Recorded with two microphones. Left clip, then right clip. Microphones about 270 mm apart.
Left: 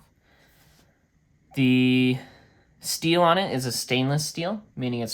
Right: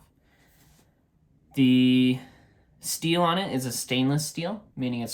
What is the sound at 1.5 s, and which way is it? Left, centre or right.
Speech, left.